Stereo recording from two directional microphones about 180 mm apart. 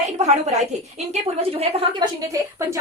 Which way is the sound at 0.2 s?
40° right (ahead or behind).